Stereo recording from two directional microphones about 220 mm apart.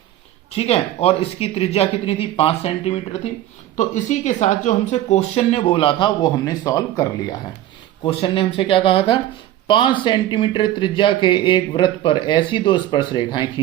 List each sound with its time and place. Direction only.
0.5 s speech: 30° left (ahead or behind)